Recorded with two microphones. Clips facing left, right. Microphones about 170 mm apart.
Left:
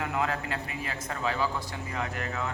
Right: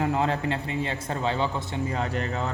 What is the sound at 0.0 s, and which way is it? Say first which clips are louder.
A man's voice: right 5 dB; 30° right (ahead or behind).